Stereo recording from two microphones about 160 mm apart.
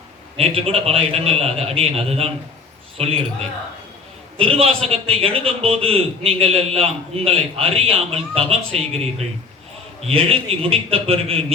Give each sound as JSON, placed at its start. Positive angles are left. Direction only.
{"t": 0.3, "sound": "a man's voice", "side_deg": -35}
{"t": 4.4, "sound": "a man's voice", "side_deg": -35}
{"t": 10.1, "sound": "a man's voice", "side_deg": -35}